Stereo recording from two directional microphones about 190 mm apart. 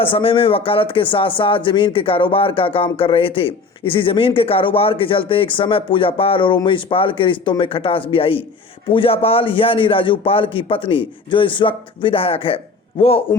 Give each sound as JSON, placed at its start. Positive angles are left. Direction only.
{"t": 0.0, "sound": "speech", "side_deg": 30}